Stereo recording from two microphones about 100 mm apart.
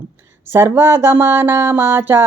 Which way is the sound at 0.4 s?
25° right (ahead or behind).